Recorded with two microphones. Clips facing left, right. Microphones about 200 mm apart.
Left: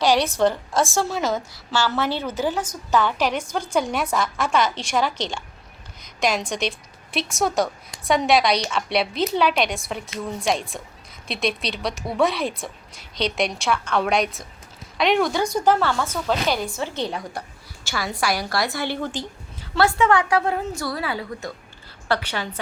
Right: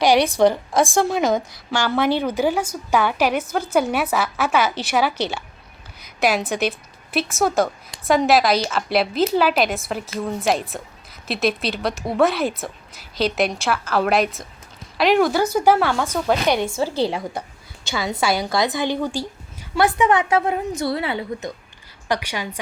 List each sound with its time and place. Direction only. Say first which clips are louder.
0.0 s a woman's voice: right 3 dB; 15° right (ahead or behind)
16.5 s a woman's voice: right 5 dB; 25° right (ahead or behind)
22.1 s a woman's voice: even; 10° right (ahead or behind)